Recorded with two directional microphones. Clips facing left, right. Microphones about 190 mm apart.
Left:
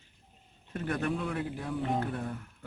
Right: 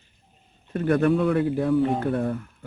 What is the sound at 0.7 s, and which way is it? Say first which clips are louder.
Speech: right 12 dB; 65° right (ahead or behind).